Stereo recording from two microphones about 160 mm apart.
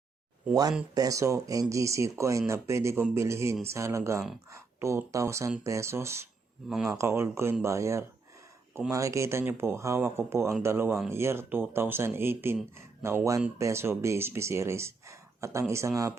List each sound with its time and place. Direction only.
0.9 s speech: 20° right (ahead or behind)